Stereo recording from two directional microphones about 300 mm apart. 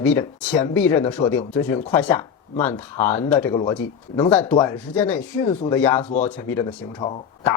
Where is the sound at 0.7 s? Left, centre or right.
Centre.